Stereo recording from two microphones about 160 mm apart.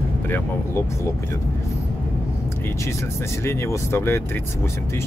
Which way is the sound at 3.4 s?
15° left (ahead or behind).